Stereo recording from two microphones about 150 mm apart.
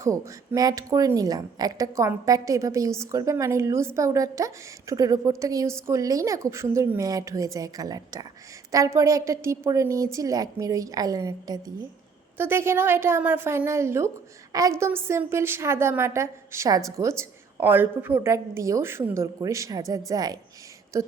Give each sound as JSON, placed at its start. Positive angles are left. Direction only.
{"t": 0.0, "sound": "a woman's voice", "side_deg": -25}